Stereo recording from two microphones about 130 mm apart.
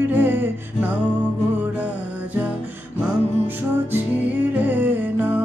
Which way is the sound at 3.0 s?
10° right (ahead or behind).